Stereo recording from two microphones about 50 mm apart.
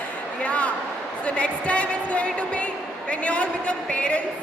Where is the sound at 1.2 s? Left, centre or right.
Left.